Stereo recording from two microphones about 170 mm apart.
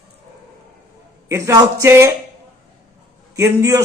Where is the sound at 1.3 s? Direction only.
15° right (ahead or behind).